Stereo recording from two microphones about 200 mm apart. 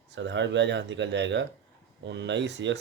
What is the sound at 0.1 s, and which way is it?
Speech, 65° right (ahead or behind).